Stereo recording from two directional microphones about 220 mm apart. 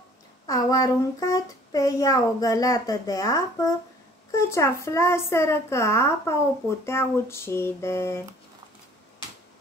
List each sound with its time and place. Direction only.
0.5 s a child's voice: 15° left (ahead or behind)